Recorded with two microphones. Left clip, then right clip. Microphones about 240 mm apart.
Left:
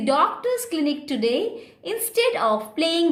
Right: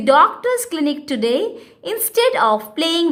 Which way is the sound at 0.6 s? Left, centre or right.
Centre.